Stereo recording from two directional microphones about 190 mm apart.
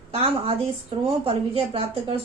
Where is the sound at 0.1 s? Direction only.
30° right (ahead or behind).